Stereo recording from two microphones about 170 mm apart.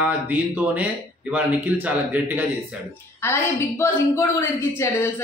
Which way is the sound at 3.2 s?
15° left (ahead or behind).